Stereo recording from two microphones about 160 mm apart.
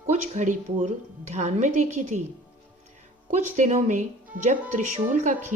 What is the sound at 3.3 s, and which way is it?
A woman's voice, 50° right (ahead or behind).